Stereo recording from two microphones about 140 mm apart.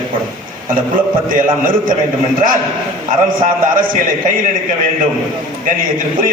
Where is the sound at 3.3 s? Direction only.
75° right (ahead or behind).